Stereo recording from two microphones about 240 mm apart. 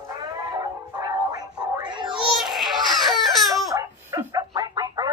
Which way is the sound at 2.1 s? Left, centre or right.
Centre.